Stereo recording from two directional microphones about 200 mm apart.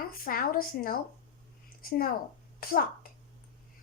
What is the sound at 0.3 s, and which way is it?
A child's voice, 45° left (ahead or behind).